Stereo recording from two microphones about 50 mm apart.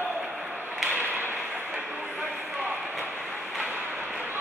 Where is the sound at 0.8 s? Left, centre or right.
Right.